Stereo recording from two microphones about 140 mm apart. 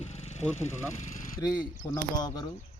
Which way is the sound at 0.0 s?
55° left (ahead or behind).